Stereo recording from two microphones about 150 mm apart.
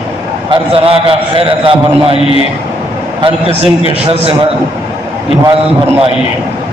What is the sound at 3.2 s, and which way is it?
Speech, 40° right (ahead or behind).